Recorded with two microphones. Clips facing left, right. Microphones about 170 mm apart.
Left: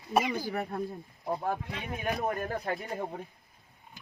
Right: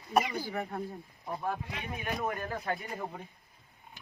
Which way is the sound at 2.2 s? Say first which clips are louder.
Left 3 dB; 40° left (ahead or behind).